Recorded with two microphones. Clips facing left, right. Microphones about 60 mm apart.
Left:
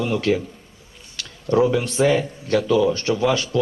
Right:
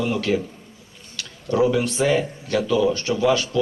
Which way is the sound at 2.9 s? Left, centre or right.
Left.